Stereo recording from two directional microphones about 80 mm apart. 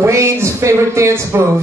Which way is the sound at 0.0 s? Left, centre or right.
Right.